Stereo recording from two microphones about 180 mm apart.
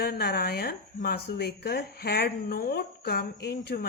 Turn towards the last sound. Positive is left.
turn(degrees=65)  # may be behind; listen again after turning